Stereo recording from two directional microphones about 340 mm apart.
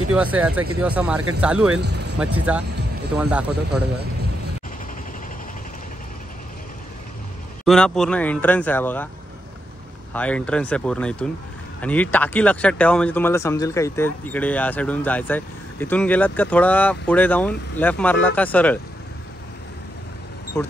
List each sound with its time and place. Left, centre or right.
0.1 s speech: centre
1.7 s speech: right
2.5 s speech: centre
7.6 s speech: centre
10.1 s speech: centre
20.5 s speech: centre